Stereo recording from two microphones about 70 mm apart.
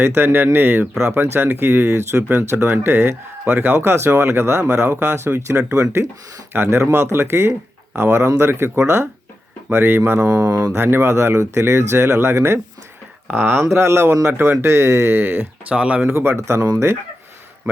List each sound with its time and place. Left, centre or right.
0.0 s speech: right
10.2 s speech: centre
10.8 s speech: right
13.2 s speech: centre
13.7 s speech: right
15.7 s speech: centre
16.0 s speech: right
16.6 s speech: right